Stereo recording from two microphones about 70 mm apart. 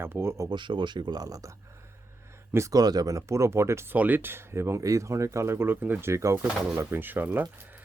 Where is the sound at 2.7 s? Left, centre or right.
Right.